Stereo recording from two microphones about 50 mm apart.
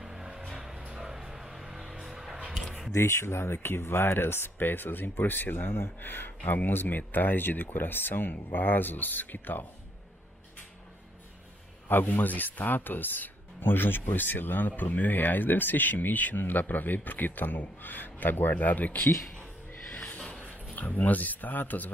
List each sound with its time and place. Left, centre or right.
0.0 s music: centre
2.5 s a sound: centre
2.9 s speech: left
11.9 s speech: left
20.7 s speech: left